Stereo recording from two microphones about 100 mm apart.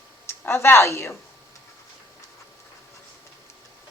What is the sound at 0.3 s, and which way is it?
Speech, 25° left (ahead or behind).